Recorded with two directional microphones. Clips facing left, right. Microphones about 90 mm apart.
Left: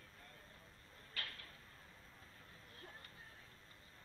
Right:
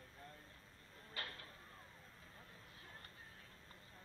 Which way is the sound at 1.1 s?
30° right (ahead or behind).